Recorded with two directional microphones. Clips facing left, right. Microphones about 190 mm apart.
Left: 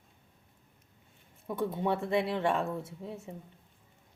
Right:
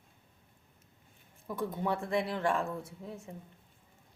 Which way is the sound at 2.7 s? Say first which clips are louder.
Left 3 dB; centre (ahead or behind).